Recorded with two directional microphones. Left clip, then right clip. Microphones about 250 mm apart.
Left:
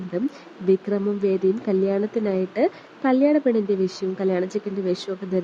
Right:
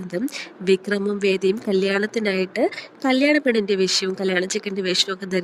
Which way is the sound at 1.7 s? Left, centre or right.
Centre.